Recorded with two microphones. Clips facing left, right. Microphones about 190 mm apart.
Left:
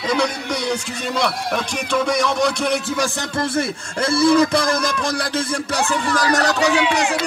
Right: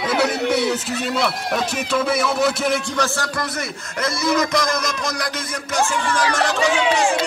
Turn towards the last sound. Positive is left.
turn(degrees=40)  # may be behind; listen again after turning